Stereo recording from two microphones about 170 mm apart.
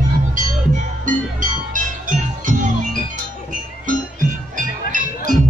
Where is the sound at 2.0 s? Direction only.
50° right (ahead or behind).